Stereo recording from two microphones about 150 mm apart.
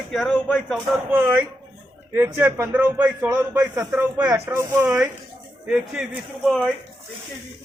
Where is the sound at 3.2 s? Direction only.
20° right (ahead or behind); by 6.6 s 5° right (ahead or behind).